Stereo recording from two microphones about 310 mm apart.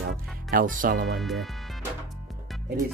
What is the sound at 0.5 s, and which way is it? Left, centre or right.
Speech, right.